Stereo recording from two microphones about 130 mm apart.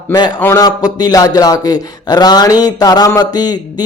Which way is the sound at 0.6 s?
30° left (ahead or behind).